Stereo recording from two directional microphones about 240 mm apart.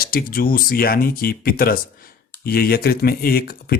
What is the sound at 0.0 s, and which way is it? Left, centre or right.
Speech, left.